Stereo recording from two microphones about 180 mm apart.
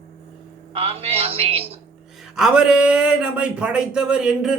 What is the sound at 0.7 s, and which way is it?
A man's voice, 30° right (ahead or behind).